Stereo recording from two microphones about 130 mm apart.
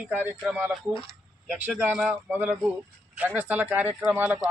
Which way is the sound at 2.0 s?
5° right (ahead or behind).